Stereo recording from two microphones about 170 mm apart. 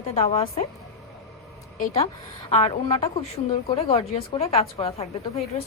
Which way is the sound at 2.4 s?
35° left (ahead or behind).